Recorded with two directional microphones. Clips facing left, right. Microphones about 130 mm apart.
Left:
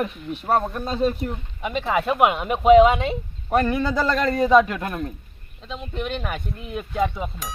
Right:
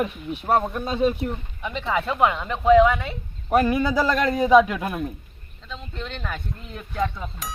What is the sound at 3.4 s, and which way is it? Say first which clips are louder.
Speech: right 1 dB; 5° right (ahead or behind).